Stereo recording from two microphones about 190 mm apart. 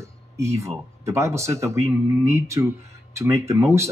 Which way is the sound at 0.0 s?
15° right (ahead or behind).